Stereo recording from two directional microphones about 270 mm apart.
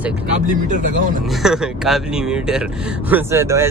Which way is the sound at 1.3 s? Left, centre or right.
Centre.